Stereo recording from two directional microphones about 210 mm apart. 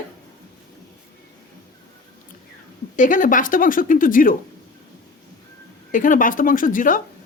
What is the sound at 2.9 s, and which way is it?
A woman's voice, 40° left (ahead or behind).